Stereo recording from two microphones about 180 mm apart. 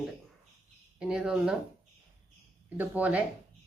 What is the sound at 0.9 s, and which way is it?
Speech, 5° right (ahead or behind).